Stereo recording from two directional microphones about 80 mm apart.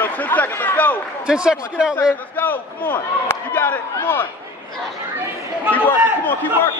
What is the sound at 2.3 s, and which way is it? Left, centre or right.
Speech, left.